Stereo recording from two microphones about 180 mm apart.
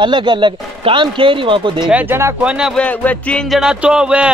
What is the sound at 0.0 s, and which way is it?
Speech, 25° right (ahead or behind).